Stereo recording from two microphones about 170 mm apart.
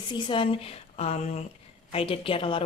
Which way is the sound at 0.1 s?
30° left (ahead or behind).